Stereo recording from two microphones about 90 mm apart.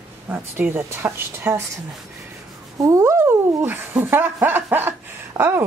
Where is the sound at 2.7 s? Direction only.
35° right (ahead or behind).